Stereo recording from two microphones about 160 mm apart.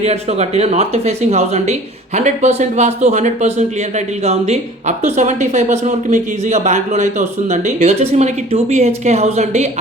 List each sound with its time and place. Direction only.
0.0 s a man's voice: 40° right (ahead or behind)